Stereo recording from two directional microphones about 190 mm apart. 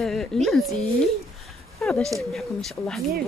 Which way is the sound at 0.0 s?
Centre (ahead or behind).